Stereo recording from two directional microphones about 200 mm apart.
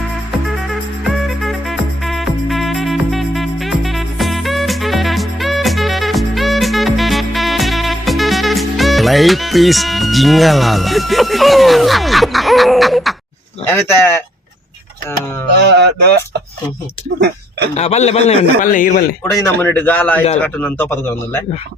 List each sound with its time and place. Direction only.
0.7 s music: centre (ahead or behind)
13.7 s speech: 10° left (ahead or behind)
15.5 s speech: 55° right (ahead or behind)
17.7 s a man's voice: 35° left (ahead or behind)
19.3 s speech: 15° left (ahead or behind)